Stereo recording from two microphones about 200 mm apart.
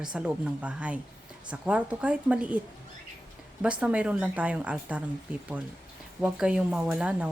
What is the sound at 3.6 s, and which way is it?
Speech, 5° right (ahead or behind).